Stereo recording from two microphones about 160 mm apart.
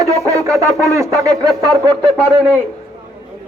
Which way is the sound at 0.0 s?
20° right (ahead or behind).